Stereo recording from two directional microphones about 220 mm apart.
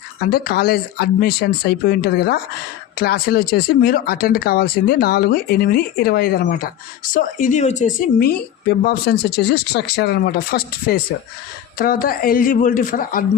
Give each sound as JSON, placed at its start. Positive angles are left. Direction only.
{"t": 0.3, "sound": "a woman's voice", "side_deg": 45}